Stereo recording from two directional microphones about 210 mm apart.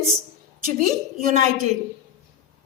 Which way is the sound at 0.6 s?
40° right (ahead or behind).